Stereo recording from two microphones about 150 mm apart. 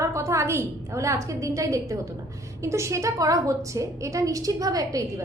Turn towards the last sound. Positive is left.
turn(degrees=-25)  # may be behind; listen again after turning